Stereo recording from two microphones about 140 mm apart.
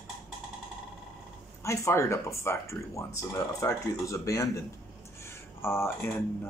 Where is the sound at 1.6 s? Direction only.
20° left (ahead or behind).